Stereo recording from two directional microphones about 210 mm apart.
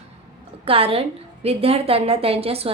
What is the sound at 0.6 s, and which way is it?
A woman's voice, 25° right (ahead or behind).